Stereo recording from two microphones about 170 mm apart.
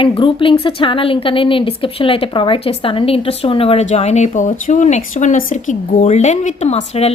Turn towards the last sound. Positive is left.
turn(degrees=40)  # may be behind; listen again after turning